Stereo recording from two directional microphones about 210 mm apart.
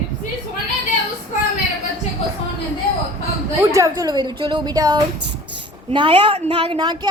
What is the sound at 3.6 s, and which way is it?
A woman's voice, 15° right (ahead or behind).